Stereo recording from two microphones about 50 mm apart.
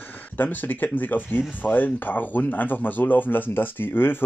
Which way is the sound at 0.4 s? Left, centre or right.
Left.